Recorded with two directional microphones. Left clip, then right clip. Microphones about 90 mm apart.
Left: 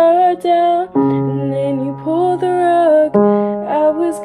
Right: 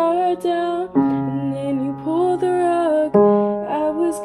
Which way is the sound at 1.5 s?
35° left (ahead or behind).